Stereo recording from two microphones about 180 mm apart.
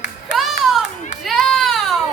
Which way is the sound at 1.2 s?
Centre (ahead or behind).